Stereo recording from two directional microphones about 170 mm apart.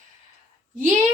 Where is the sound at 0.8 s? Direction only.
50° right (ahead or behind).